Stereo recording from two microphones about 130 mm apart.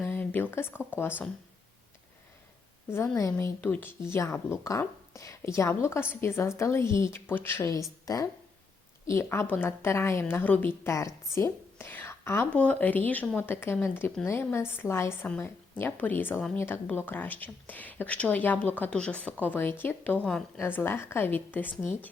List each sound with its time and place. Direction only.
0.0 s speech: 15° left (ahead or behind)
2.9 s a woman's voice: 25° left (ahead or behind)